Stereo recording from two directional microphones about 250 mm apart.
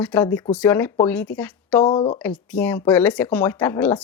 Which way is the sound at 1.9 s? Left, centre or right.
Centre.